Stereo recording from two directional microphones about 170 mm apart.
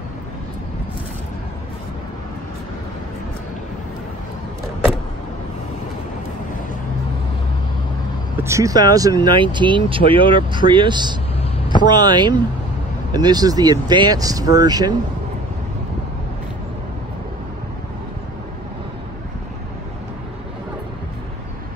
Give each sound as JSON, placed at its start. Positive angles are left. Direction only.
{"t": 8.4, "sound": "speech", "side_deg": -15}